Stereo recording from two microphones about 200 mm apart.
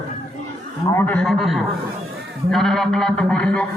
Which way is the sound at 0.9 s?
10° left (ahead or behind).